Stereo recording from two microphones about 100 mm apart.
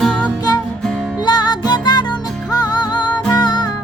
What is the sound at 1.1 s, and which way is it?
Music, 45° left (ahead or behind).